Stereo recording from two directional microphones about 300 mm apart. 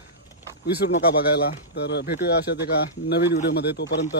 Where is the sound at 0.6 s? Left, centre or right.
Left.